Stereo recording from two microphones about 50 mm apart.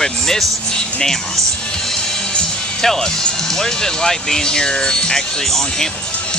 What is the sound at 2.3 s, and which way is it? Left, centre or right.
Music, centre.